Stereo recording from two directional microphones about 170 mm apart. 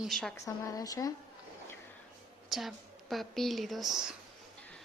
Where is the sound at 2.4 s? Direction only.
Centre (ahead or behind).